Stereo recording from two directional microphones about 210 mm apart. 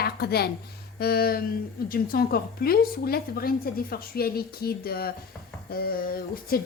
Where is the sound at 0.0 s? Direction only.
50° left (ahead or behind).